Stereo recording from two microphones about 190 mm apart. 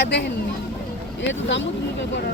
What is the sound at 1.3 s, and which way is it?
Speech, 70° left (ahead or behind).